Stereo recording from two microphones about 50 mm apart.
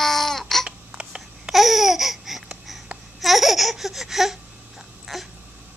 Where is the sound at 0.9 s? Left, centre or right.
Centre.